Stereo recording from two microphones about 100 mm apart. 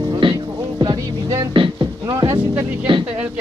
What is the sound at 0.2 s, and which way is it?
Music, 50° right (ahead or behind).